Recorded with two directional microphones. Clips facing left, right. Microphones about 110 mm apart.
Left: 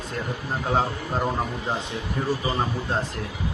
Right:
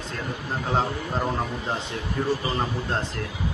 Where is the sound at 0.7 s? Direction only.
5° left (ahead or behind).